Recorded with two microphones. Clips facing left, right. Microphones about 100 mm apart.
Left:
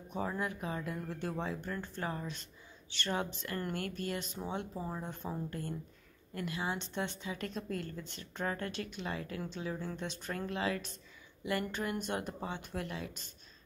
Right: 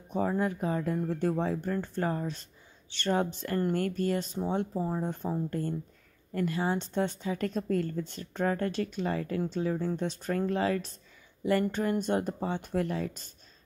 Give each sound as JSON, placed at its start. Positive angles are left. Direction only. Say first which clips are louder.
{"t": 0.1, "sound": "a woman's voice", "louder": "right 8 dB", "side_deg": -35}